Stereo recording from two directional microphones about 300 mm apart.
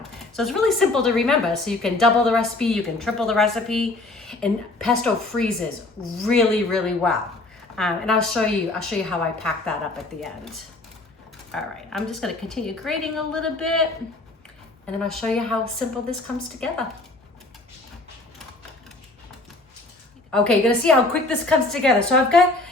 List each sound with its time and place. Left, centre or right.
0.3 s a woman's voice: centre
6.2 s a woman's voice: centre
11.5 s a woman's voice: centre
14.8 s a woman's voice: centre
20.3 s a woman's voice: centre